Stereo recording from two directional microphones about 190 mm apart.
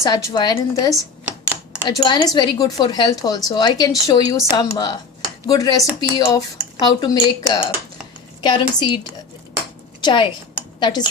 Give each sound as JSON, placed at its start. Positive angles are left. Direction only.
{"t": 0.0, "sound": "speech", "side_deg": 15}
{"t": 10.0, "sound": "speech", "side_deg": 25}